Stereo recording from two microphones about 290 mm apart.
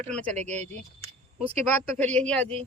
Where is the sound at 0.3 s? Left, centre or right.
Right.